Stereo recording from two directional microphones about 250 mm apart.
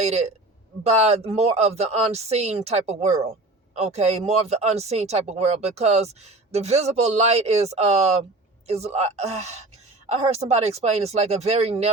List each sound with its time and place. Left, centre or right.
0.0 s speech: right